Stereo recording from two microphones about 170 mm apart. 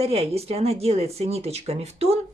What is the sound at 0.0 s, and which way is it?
Speech, 35° right (ahead or behind).